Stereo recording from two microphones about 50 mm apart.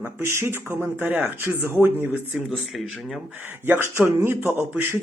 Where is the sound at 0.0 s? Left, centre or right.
Right.